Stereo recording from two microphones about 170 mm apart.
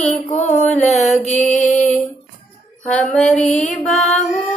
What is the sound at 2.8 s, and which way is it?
Music, 5° left (ahead or behind).